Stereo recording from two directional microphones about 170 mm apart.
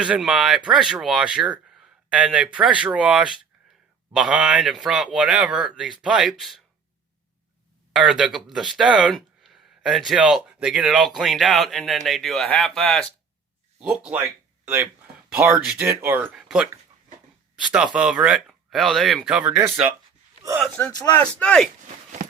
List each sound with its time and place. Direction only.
0.0 s speech: 5° right (ahead or behind)
7.9 s speech: 5° right (ahead or behind)
15.3 s speech: 10° right (ahead or behind)
17.9 s speech: 5° right (ahead or behind)
21.3 s speech: 5° left (ahead or behind)
22.2 s walk: 60° right (ahead or behind)